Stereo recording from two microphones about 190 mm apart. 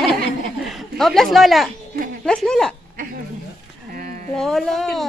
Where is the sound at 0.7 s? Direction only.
Centre (ahead or behind).